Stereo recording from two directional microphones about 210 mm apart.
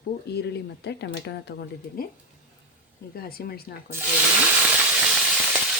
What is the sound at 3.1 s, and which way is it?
Speech, 45° left (ahead or behind).